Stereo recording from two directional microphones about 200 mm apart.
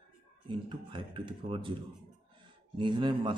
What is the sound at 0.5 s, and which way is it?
A man's voice, 25° right (ahead or behind).